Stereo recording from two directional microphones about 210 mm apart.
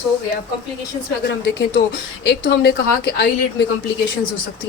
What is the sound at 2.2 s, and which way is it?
A woman's voice, 55° left (ahead or behind).